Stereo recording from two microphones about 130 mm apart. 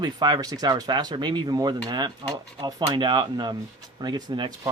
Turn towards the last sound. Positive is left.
turn(degrees=-35)  # may be behind; listen again after turning